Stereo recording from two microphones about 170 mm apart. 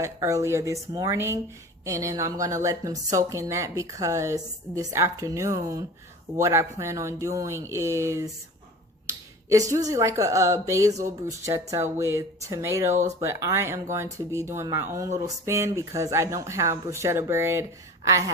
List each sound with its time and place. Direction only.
0.0 s a woman's voice: 20° right (ahead or behind)
9.5 s speech: 15° right (ahead or behind)